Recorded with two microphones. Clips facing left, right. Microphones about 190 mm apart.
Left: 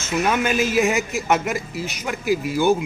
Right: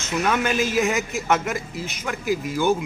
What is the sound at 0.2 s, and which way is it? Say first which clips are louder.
A man's voice: left 2 dB; 10° left (ahead or behind).